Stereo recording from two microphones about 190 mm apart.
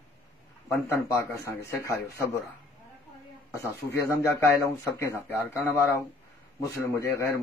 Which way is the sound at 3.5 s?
15° left (ahead or behind).